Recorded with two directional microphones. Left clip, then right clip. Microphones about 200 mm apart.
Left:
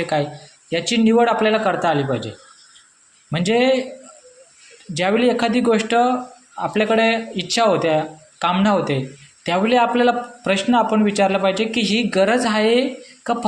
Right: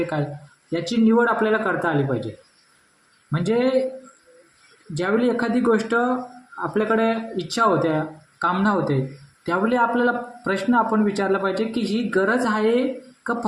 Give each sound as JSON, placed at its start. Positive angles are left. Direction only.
{"t": 0.7, "sound": "speech", "side_deg": 25}
{"t": 3.3, "sound": "speech", "side_deg": 20}
{"t": 4.9, "sound": "speech", "side_deg": 20}